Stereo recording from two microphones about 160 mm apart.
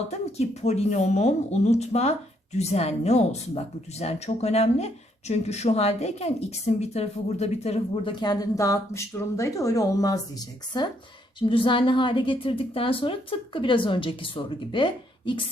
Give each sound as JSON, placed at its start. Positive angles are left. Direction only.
{"t": 0.1, "sound": "a woman's voice", "side_deg": 45}
{"t": 8.1, "sound": "a woman's voice", "side_deg": 25}